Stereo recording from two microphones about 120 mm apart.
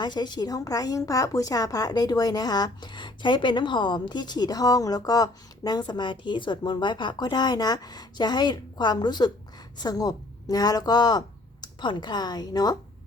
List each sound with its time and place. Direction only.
0.0 s a woman's voice: 35° left (ahead or behind)